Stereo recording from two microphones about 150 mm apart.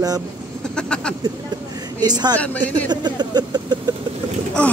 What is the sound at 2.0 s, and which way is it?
Speech, 25° right (ahead or behind).